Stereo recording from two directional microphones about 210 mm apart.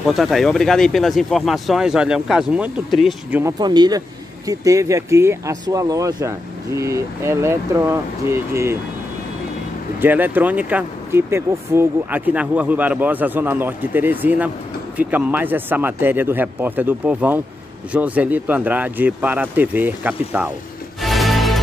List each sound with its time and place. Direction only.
0.0 s speech: centre (ahead or behind)
3.5 s speech: 20° right (ahead or behind)
9.9 s speech: 10° right (ahead or behind)
21.0 s music: centre (ahead or behind)